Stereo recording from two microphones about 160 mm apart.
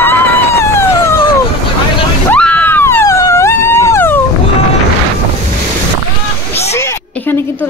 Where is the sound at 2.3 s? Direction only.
10° left (ahead or behind).